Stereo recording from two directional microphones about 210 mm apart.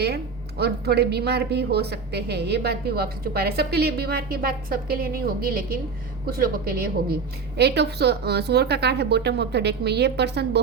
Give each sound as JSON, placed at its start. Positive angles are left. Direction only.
{"t": 0.0, "sound": "a woman's voice", "side_deg": -50}